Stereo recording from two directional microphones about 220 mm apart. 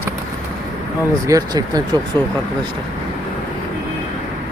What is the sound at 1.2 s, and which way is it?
Speech, 15° right (ahead or behind).